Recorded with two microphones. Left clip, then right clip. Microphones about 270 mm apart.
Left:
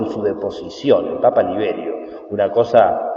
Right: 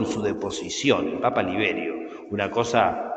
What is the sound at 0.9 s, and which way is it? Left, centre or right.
A man's voice, right.